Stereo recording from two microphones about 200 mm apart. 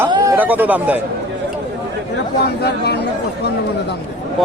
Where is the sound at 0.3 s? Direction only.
10° right (ahead or behind).